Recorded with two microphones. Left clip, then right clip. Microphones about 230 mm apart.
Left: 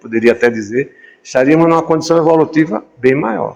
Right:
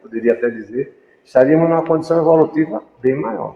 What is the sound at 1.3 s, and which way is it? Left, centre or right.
A man's voice, left.